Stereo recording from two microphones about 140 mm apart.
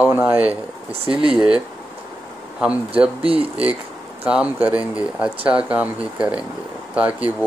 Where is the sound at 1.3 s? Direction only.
5° right (ahead or behind).